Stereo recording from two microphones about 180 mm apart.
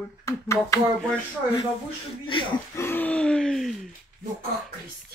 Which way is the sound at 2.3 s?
30° left (ahead or behind).